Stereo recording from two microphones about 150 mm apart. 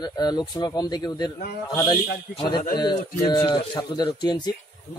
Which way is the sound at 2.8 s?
30° left (ahead or behind).